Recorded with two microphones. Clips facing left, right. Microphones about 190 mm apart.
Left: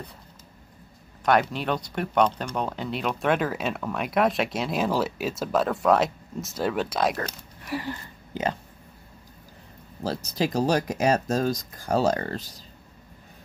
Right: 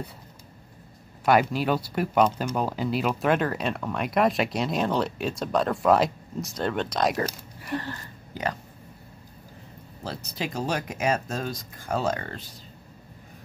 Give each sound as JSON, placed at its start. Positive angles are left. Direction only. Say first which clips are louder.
{"t": 1.2, "sound": "speech", "louder": "right 1 dB", "side_deg": -5}
{"t": 7.6, "sound": "a sound", "louder": "even", "side_deg": 5}
{"t": 7.9, "sound": "speech", "louder": "left 3 dB", "side_deg": 25}
{"t": 10.0, "sound": "speech", "louder": "left 6 dB", "side_deg": 40}